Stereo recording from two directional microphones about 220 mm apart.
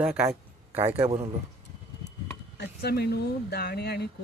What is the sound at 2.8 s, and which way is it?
Speech, 45° left (ahead or behind).